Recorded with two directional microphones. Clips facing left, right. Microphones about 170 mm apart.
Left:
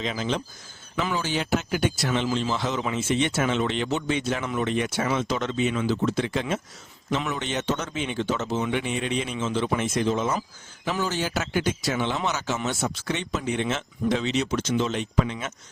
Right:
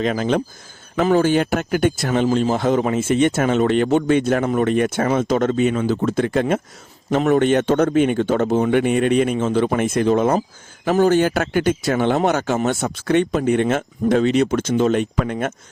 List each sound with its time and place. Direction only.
0.0 s speech: 55° right (ahead or behind)